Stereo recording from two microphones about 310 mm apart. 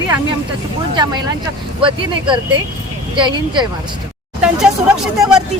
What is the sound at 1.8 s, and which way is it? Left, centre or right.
Speech, centre.